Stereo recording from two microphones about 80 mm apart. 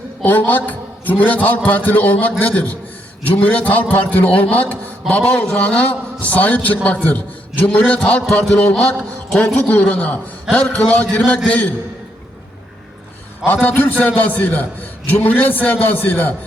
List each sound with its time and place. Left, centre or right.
0.2 s a man's voice: left
13.4 s a man's voice: left